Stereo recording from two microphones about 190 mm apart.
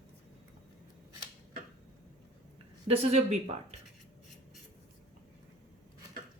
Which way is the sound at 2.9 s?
35° right (ahead or behind).